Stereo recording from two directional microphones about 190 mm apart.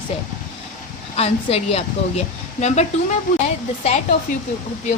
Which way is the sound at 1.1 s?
30° left (ahead or behind).